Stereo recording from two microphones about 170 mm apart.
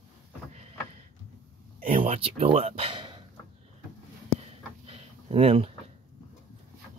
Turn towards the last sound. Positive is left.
turn(degrees=-35)  # may be behind; listen again after turning